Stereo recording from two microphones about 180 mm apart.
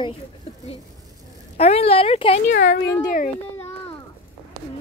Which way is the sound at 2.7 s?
55° left (ahead or behind).